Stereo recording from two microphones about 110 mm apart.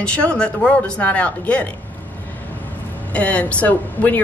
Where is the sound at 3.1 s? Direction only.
10° left (ahead or behind).